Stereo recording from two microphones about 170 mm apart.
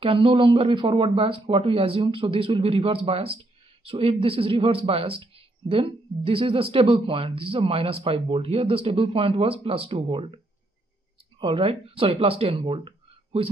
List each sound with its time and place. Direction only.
0.0 s speech: 30° right (ahead or behind)